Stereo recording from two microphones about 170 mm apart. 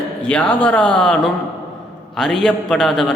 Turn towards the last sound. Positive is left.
turn(degrees=5)  # may be behind; listen again after turning